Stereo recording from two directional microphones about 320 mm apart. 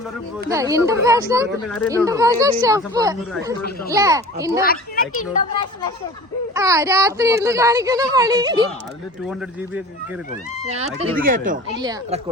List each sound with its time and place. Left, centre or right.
0.4 s speech: centre
4.6 s speech: left
6.5 s speech: centre
10.8 s speech: right
11.8 s speech: centre